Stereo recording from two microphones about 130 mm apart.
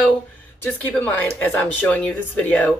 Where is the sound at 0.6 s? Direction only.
15° left (ahead or behind).